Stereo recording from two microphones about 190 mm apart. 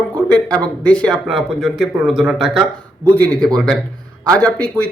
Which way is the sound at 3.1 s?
10° left (ahead or behind).